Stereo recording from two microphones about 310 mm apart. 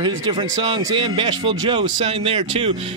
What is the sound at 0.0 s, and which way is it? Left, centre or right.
A man's voice, centre.